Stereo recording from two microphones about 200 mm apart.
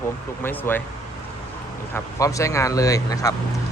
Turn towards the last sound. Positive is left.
turn(degrees=15)  # may be behind; listen again after turning